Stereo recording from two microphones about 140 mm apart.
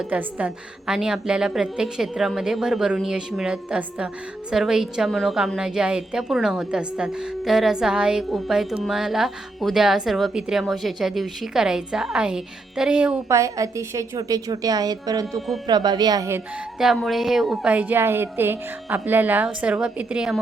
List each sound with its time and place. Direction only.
0.1 s speech: 10° right (ahead or behind)
13.2 s a woman's voice: 20° right (ahead or behind)
16.7 s a woman's voice: centre (ahead or behind)